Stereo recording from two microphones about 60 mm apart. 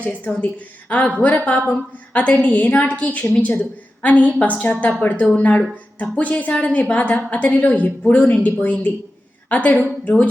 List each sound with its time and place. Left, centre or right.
0.0 s a woman's voice: left